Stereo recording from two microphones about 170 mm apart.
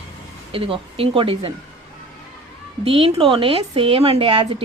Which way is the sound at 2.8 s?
35° right (ahead or behind).